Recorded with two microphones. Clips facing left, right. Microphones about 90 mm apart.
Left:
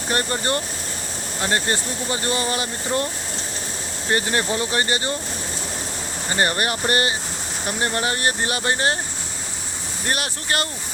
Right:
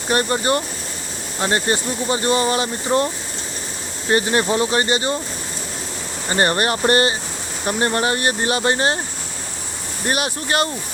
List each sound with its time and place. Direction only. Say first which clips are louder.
0.1 s speech: right 5 dB; 20° right (ahead or behind)
4.1 s speech: right 4 dB; 25° right (ahead or behind)
6.3 s speech: right 4 dB; 35° right (ahead or behind)
10.1 s speech: right 4 dB; 20° right (ahead or behind)